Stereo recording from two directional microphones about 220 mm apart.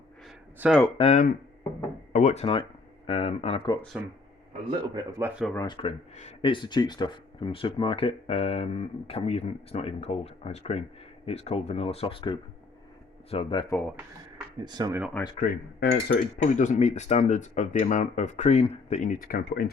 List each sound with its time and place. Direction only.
0.3 s a sound: centre (ahead or behind)
0.9 s speech: 30° left (ahead or behind)
4.8 s speech: 15° right (ahead or behind)
5.5 s speech: 20° left (ahead or behind)
13.7 s speech: 5° left (ahead or behind)
14.6 s speech: 20° right (ahead or behind)
15.4 s speech: 45° left (ahead or behind)
16.4 s speech: 35° left (ahead or behind)